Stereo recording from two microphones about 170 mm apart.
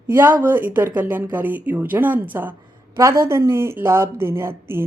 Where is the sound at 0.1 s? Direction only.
15° right (ahead or behind).